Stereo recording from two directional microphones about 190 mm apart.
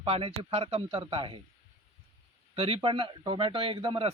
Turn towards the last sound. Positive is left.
turn(degrees=-25)  # may be behind; listen again after turning